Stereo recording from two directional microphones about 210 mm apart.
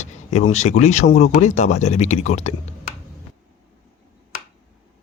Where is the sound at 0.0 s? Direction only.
30° left (ahead or behind).